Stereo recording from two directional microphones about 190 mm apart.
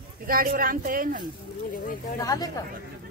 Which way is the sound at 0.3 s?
50° right (ahead or behind).